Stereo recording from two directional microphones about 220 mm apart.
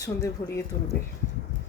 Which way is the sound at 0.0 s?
15° left (ahead or behind).